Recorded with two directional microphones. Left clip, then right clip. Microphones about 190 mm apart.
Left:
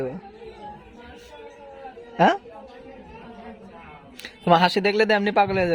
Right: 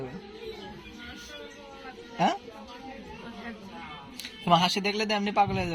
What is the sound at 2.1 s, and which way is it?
Speech, 55° left (ahead or behind).